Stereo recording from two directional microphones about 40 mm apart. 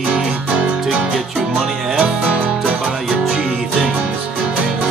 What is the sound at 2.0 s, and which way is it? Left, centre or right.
Music, right.